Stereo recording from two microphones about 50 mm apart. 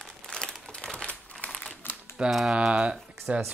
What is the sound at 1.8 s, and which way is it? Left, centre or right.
Typing, left.